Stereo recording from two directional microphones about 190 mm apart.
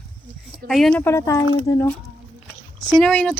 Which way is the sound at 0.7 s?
Centre (ahead or behind).